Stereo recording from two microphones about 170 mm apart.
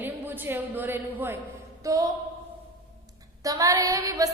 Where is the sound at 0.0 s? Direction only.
10° right (ahead or behind).